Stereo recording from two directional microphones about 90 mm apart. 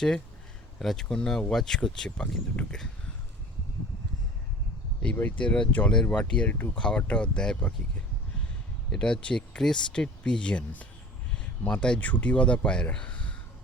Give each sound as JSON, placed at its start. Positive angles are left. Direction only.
{"t": 0.8, "sound": "speech", "side_deg": 5}
{"t": 5.1, "sound": "speech", "side_deg": 15}
{"t": 8.9, "sound": "speech", "side_deg": 5}